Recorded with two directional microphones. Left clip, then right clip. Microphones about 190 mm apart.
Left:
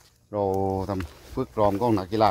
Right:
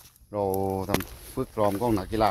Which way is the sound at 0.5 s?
20° left (ahead or behind).